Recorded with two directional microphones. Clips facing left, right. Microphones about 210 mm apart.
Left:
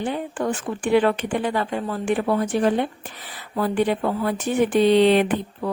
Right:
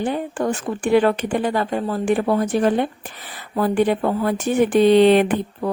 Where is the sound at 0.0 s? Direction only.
45° right (ahead or behind).